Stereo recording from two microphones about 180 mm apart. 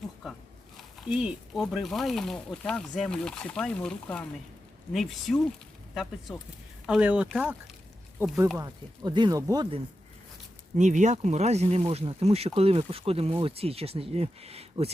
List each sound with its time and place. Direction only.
1.0 s speech: 5° right (ahead or behind)
8.5 s speech: 20° right (ahead or behind)
10.8 s speech: 45° right (ahead or behind)